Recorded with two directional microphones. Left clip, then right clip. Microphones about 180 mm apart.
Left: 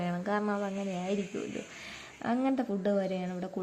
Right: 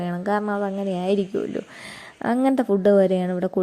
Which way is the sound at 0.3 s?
30° right (ahead or behind).